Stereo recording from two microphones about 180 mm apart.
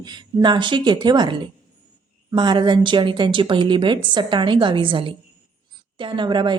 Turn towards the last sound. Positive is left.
turn(degrees=-25)  # may be behind; listen again after turning